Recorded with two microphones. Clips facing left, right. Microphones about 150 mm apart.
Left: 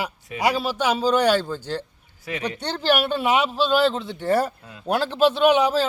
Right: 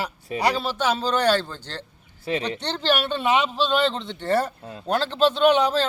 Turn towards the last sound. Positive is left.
turn(degrees=10)  # may be behind; listen again after turning